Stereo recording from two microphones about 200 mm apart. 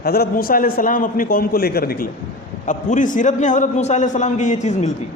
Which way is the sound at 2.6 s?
40° left (ahead or behind).